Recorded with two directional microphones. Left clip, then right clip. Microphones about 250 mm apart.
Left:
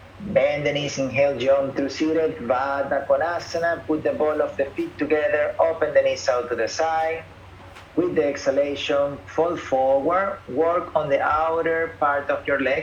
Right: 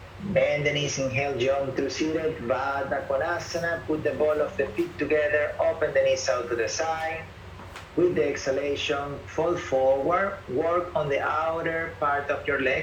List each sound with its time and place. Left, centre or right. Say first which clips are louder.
0.3 s speech: left 3 dB; centre
8.1 s speech: left 5 dB; centre